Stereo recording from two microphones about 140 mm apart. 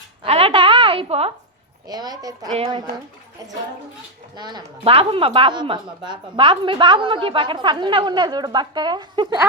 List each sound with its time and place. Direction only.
0.2 s a sound: 45° right (ahead or behind)
1.9 s speech: 30° right (ahead or behind)
4.4 s a woman's voice: 30° right (ahead or behind)
4.8 s a woman's voice: 45° right (ahead or behind)